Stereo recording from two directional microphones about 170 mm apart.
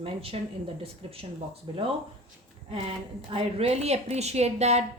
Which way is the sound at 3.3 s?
35° right (ahead or behind).